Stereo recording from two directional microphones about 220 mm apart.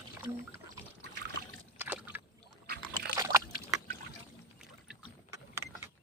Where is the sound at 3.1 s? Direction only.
15° right (ahead or behind).